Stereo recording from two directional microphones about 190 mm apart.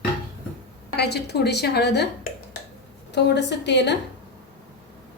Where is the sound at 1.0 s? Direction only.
60° left (ahead or behind).